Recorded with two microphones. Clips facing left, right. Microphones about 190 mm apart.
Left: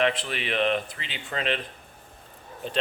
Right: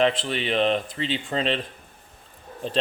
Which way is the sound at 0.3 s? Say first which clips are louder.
Right 3 dB; 30° right (ahead or behind).